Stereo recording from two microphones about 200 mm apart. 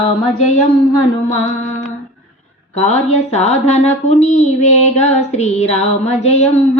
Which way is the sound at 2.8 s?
35° left (ahead or behind).